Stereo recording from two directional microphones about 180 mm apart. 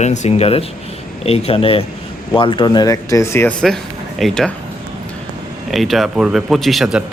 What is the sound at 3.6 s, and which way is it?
Speech, centre (ahead or behind).